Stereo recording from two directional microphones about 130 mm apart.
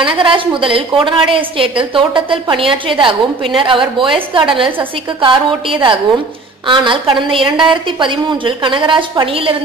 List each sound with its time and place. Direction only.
0.0 s a woman's voice: 40° right (ahead or behind)